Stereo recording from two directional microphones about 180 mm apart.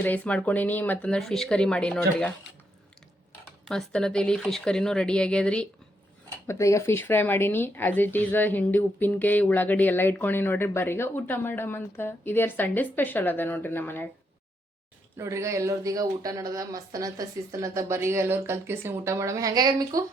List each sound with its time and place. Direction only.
0.0 s speech: 10° left (ahead or behind)
3.7 s speech: 5° left (ahead or behind)
6.5 s speech: 15° left (ahead or behind)
15.2 s speech: 15° right (ahead or behind)